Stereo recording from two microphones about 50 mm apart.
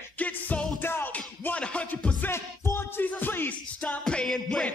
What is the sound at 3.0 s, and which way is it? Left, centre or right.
Music, left.